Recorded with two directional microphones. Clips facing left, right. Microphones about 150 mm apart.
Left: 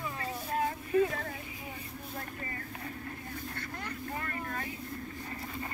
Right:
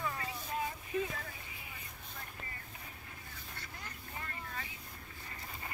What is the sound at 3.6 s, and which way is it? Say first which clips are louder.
Vehicle: left 10 dB; 75° left (ahead or behind).